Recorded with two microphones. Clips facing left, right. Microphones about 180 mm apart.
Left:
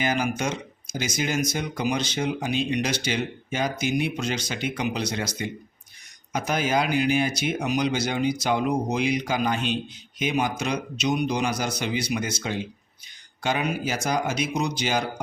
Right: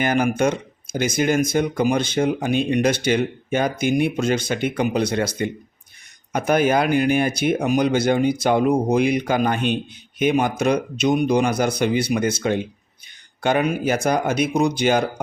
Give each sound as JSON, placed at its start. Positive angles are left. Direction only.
{"t": 0.0, "sound": "speech", "side_deg": -55}